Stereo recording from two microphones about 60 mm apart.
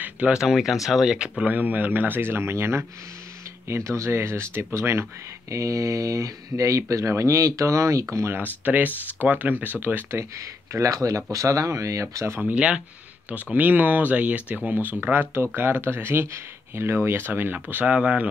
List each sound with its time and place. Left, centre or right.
0.3 s speech: centre
1.4 s speech: right
5.5 s speech: right
8.4 s speech: right
10.3 s speech: right
12.4 s speech: right